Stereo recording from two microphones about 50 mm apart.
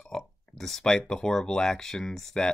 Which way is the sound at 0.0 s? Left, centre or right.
Centre.